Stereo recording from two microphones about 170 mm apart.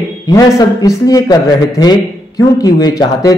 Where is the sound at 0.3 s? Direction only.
20° left (ahead or behind).